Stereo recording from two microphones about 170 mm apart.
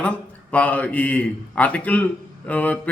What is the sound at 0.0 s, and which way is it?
Speech, 10° left (ahead or behind).